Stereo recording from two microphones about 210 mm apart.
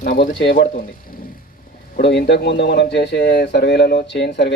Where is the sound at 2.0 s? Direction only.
55° left (ahead or behind).